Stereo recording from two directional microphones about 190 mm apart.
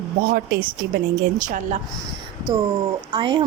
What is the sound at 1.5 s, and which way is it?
Speech, 40° right (ahead or behind).